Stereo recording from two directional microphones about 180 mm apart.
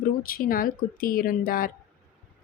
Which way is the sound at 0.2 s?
50° left (ahead or behind).